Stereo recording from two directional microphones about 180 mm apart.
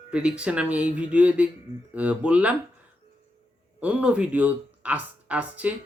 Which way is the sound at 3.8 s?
5° right (ahead or behind).